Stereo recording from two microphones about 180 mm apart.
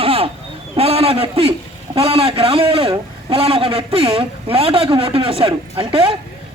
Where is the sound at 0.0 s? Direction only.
30° right (ahead or behind).